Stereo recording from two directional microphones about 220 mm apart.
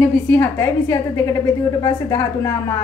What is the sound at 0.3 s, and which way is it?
A woman's voice, 10° left (ahead or behind).